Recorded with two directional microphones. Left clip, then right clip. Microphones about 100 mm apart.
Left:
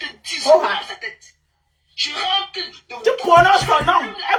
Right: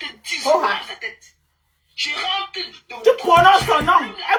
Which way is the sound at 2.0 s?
35° right (ahead or behind).